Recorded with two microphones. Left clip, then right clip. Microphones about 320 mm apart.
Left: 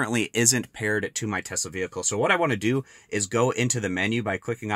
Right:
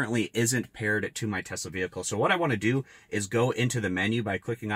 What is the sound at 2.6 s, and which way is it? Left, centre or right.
Speech, left.